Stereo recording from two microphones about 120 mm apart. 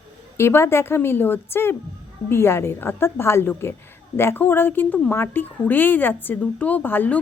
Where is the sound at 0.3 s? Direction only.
20° left (ahead or behind).